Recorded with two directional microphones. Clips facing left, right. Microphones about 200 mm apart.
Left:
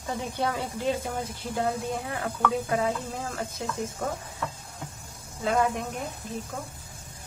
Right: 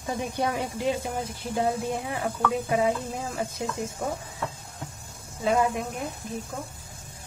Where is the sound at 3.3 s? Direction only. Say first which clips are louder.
Right 3 dB; 10° right (ahead or behind).